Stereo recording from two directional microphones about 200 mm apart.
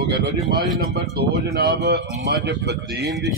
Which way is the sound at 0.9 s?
50° right (ahead or behind).